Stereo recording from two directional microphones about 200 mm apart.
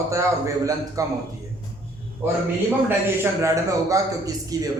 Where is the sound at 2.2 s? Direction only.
10° right (ahead or behind).